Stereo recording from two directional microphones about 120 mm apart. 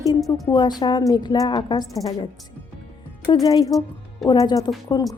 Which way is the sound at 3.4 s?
30° left (ahead or behind).